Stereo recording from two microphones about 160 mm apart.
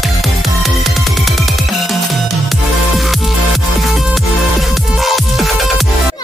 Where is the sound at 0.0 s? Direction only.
Centre (ahead or behind).